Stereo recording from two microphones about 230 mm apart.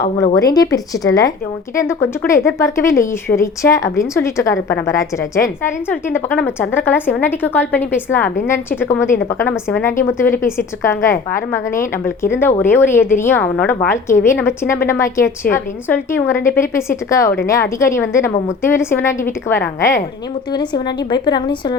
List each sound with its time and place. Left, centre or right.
0.3 s a woman's voice: centre